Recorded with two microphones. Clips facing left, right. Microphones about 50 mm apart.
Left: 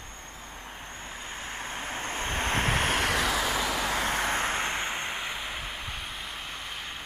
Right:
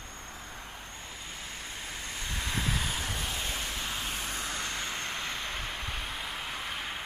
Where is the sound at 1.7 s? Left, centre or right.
Left; by 6.0 s centre.